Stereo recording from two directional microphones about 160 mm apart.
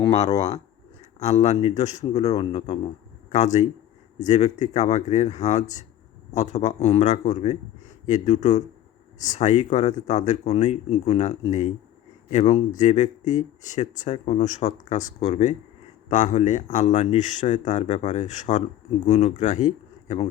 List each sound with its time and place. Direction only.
0.0 s speech: 35° left (ahead or behind)